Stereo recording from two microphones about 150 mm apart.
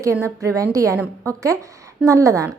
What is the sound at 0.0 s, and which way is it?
Speech, 20° right (ahead or behind).